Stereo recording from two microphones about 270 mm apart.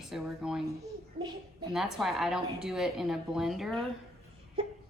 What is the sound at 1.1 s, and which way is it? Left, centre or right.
Speech, centre.